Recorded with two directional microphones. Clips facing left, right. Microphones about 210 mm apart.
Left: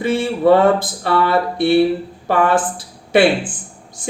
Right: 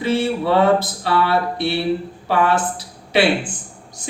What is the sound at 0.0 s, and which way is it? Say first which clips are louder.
Speech: left 3 dB; 50° left (ahead or behind).